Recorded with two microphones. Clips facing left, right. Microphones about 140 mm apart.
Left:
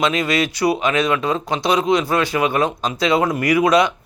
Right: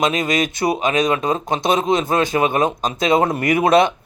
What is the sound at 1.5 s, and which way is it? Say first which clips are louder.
Speech: right 1 dB; 50° right (ahead or behind).